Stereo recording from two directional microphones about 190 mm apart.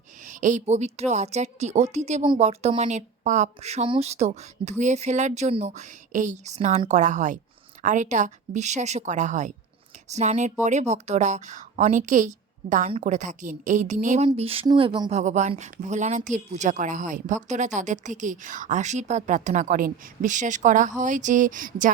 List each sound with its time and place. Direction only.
0.3 s a woman's voice: 40° right (ahead or behind); by 15.1 s 25° right (ahead or behind)
15.1 s a woman's voice: 40° right (ahead or behind)